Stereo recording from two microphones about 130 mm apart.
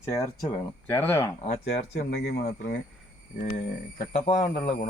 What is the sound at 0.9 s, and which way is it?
Speech, 20° left (ahead or behind).